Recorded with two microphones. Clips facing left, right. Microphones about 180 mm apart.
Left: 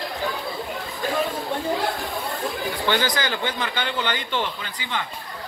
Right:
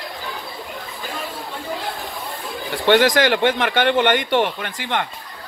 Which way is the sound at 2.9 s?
75° right (ahead or behind).